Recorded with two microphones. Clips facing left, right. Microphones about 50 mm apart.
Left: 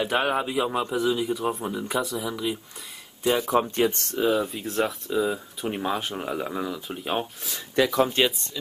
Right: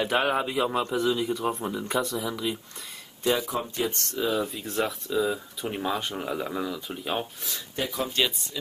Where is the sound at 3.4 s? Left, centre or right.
Left.